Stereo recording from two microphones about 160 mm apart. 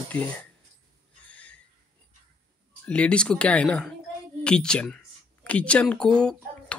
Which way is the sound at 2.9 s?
5° left (ahead or behind).